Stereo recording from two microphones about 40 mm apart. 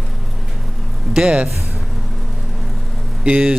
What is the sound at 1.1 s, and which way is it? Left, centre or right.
Speech, right.